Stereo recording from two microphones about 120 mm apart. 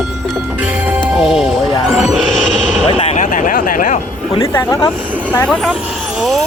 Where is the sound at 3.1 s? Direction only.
90° left.